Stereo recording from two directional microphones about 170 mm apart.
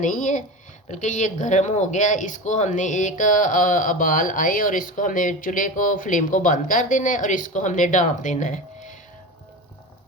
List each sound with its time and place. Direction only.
0.0 s speech: 50° left (ahead or behind)